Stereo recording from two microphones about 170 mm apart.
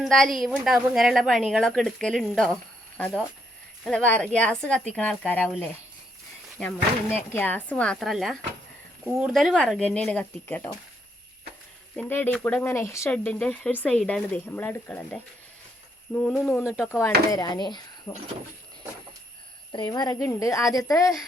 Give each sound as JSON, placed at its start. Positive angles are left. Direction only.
{"t": 0.0, "sound": "speech", "side_deg": 0}
{"t": 3.8, "sound": "speech", "side_deg": 5}
{"t": 6.6, "sound": "speech", "side_deg": 10}
{"t": 11.9, "sound": "speech", "side_deg": 10}
{"t": 16.4, "sound": "a woman's voice", "side_deg": 15}
{"t": 19.7, "sound": "a woman's voice", "side_deg": 25}